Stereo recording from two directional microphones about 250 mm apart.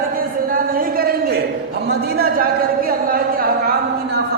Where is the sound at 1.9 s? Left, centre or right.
Right.